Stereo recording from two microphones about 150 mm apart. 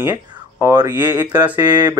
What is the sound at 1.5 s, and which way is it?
Speech, 30° right (ahead or behind).